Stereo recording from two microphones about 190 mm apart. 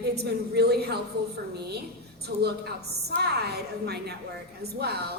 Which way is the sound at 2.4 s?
60° right (ahead or behind).